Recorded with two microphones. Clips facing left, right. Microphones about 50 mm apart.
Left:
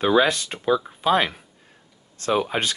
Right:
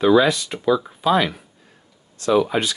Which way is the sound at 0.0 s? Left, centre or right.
Left.